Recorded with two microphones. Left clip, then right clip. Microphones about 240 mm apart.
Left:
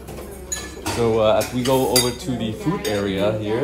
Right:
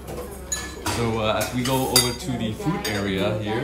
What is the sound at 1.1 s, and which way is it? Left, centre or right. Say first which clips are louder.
Speech: left 8 dB; centre.